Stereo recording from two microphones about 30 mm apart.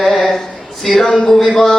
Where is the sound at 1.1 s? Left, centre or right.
Centre.